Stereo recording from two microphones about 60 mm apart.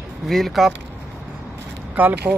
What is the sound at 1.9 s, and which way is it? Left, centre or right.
Speech, right.